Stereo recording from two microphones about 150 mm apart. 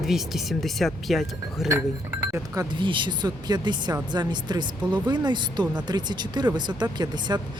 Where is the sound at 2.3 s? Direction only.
20° right (ahead or behind).